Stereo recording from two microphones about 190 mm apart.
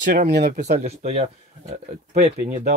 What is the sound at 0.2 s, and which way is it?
Speech, 50° right (ahead or behind).